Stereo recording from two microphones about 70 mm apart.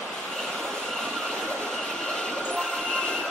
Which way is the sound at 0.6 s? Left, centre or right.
Centre.